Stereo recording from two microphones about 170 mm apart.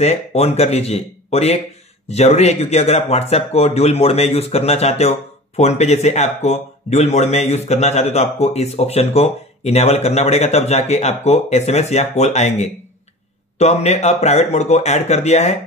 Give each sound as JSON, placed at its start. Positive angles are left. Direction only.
{"t": 0.0, "sound": "speech", "side_deg": 40}